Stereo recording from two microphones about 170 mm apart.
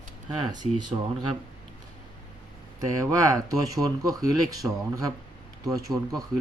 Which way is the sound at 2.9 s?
20° right (ahead or behind).